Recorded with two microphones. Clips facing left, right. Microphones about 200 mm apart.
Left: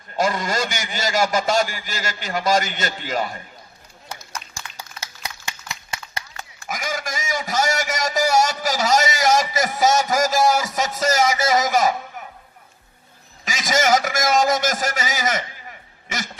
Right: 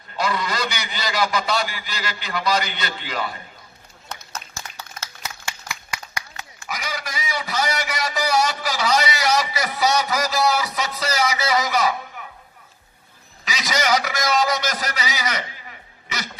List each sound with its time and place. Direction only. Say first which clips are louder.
0.2 s a man's voice: left 3 dB; 45° left (ahead or behind)
4.8 s a sound: left 1 dB; 15° left (ahead or behind)
6.7 s a man's voice: left 3 dB; 45° left (ahead or behind)
13.4 s a man's voice: left 3 dB; 45° left (ahead or behind)
16.0 s music: left 2 dB; 50° left (ahead or behind)